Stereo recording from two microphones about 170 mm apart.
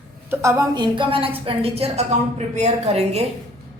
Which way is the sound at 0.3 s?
20° right (ahead or behind).